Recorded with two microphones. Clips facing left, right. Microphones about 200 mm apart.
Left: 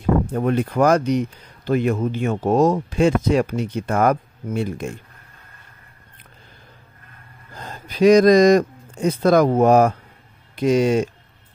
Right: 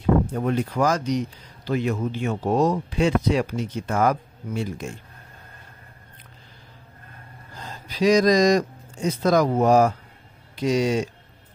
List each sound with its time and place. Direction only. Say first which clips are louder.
0.3 s speech: left 4 dB; 55° left (ahead or behind)
7.6 s speech: left 6 dB; 55° left (ahead or behind)